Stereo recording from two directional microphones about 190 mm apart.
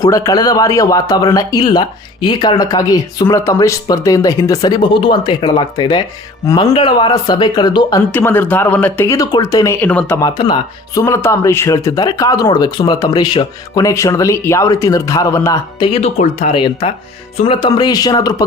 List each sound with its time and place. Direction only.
0.0 s speech: 20° left (ahead or behind)
10.2 s speech: 25° left (ahead or behind)
15.9 s speech: 35° left (ahead or behind)